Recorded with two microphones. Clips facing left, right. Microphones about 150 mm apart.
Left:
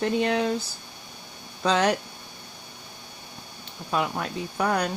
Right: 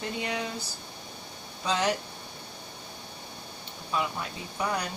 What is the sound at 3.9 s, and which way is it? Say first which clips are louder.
Speech: left 5 dB; 65° left (ahead or behind).